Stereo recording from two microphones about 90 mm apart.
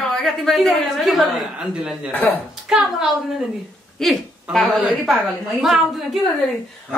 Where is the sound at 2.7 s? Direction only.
10° right (ahead or behind).